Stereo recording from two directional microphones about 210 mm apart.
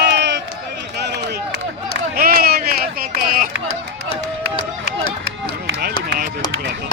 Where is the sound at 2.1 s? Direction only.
45° right (ahead or behind).